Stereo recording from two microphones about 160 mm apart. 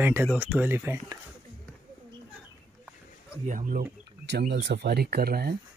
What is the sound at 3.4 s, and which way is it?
Speech, 55° right (ahead or behind).